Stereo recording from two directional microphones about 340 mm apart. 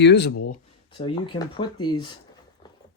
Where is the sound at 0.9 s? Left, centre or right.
Centre.